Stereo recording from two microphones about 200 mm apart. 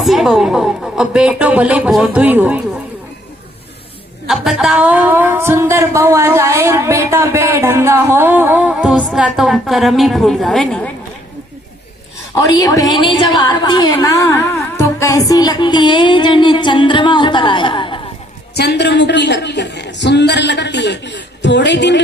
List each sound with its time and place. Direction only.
0.0 s a woman's voice: centre (ahead or behind)
4.3 s speech: centre (ahead or behind)
12.4 s a woman's voice: 20° left (ahead or behind)
18.5 s speech: 55° left (ahead or behind)